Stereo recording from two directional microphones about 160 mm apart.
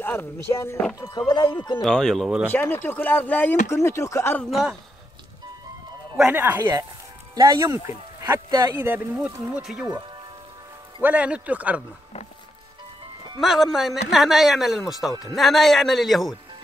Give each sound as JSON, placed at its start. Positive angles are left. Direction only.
{"t": 0.0, "sound": "speech", "side_deg": 15}
{"t": 1.1, "sound": "speech", "side_deg": 30}
{"t": 1.8, "sound": "speech", "side_deg": 5}
{"t": 2.5, "sound": "speech", "side_deg": 15}
{"t": 6.1, "sound": "speech", "side_deg": -10}
{"t": 8.7, "sound": "speech", "side_deg": -10}
{"t": 11.0, "sound": "speech", "side_deg": -10}
{"t": 13.4, "sound": "speech", "side_deg": 0}